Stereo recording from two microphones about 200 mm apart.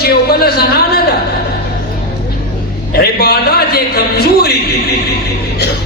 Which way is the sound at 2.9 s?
50° left (ahead or behind).